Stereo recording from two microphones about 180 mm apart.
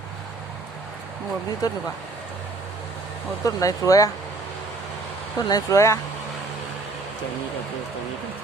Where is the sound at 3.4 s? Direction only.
20° left (ahead or behind).